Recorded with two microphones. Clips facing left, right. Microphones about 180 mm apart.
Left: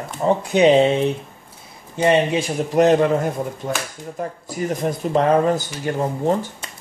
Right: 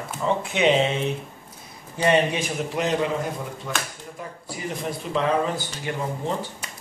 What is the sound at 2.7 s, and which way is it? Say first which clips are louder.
Speech: left 10 dB; 50° left (ahead or behind).